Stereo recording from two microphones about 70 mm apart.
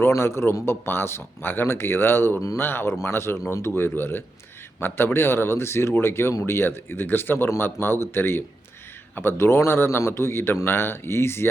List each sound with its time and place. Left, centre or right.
0.1 s speech: left